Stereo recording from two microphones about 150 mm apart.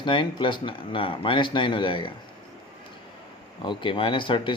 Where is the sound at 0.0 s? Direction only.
35° left (ahead or behind).